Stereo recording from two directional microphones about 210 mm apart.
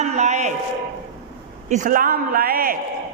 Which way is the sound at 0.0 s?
35° right (ahead or behind).